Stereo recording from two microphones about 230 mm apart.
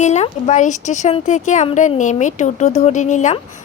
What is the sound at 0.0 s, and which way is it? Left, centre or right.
Speech, left.